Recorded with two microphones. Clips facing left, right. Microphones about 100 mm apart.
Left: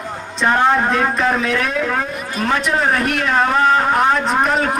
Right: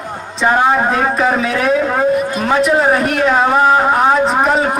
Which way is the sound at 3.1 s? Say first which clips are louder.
Right 5 dB; 25° right (ahead or behind).